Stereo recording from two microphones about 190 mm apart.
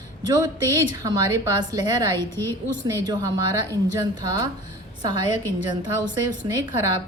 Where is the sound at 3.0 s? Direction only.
20° right (ahead or behind).